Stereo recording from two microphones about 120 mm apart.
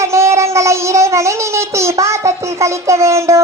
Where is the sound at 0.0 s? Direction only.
25° right (ahead or behind).